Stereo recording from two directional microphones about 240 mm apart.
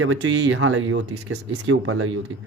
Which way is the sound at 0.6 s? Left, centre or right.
Right.